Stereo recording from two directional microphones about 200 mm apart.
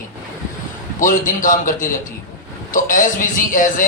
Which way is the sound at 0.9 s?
40° left (ahead or behind).